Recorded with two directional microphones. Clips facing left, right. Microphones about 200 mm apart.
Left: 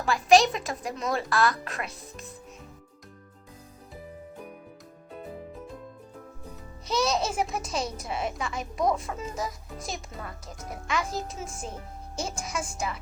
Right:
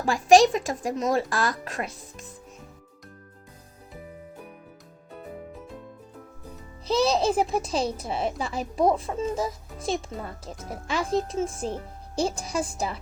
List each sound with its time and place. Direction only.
0.0 s speech: 45° right (ahead or behind)
6.8 s speech: 30° right (ahead or behind)